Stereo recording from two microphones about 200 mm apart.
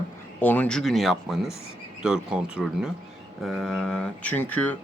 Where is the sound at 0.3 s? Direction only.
10° left (ahead or behind).